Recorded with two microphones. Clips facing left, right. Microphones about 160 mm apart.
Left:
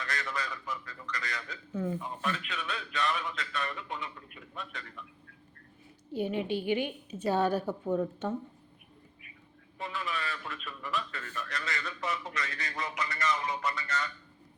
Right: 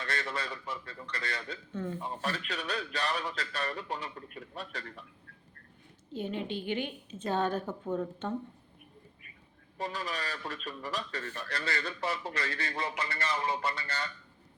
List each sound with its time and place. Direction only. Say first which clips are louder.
0.0 s a man's voice: right 1 dB; 30° right (ahead or behind)
1.7 s a woman's voice: left 4 dB; 10° left (ahead or behind)
2.0 s a man's voice: even; 35° right (ahead or behind)
6.1 s a woman's voice: left 4 dB; 10° left (ahead or behind)
9.7 s a man's voice: right 1 dB; 40° right (ahead or behind)